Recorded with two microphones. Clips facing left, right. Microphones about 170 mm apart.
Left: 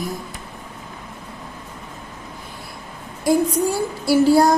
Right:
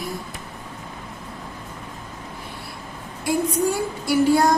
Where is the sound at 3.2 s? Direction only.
35° left (ahead or behind).